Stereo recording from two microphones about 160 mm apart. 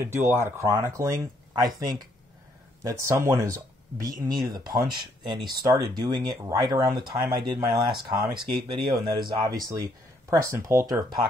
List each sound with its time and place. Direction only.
0.0 s speech: 15° right (ahead or behind)
2.8 s speech: 20° right (ahead or behind)